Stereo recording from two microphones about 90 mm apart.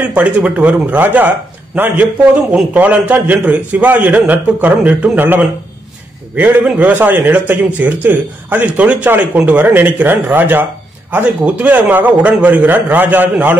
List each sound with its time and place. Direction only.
0.1 s a man's voice: 15° right (ahead or behind)
2.5 s a man's voice: 15° right (ahead or behind)